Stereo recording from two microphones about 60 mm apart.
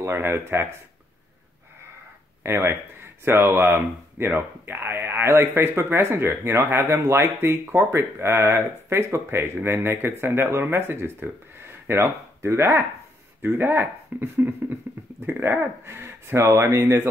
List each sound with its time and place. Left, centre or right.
0.0 s speech: right
2.4 s speech: right
13.4 s speech: right
15.8 s speech: right